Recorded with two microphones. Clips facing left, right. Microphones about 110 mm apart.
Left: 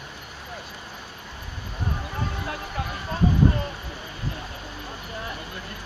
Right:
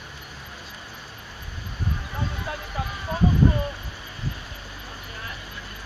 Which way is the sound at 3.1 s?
5° right (ahead or behind).